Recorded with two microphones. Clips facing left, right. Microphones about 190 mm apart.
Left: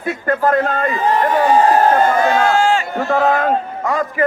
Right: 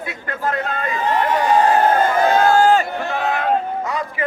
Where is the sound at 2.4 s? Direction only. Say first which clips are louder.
Right 1 dB; 45° right (ahead or behind).